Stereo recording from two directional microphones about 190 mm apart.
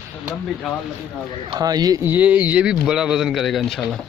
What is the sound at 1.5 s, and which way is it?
Speech, 20° right (ahead or behind).